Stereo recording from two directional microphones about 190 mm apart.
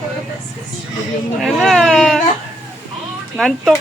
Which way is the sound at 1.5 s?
Centre (ahead or behind).